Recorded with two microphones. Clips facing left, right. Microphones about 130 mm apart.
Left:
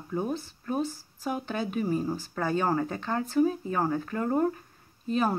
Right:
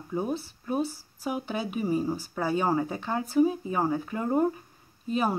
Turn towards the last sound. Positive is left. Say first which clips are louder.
# even
turn(degrees=-10)  # may be behind; listen again after turning